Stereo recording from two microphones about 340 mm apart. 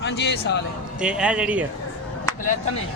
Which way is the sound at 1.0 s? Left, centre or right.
Centre.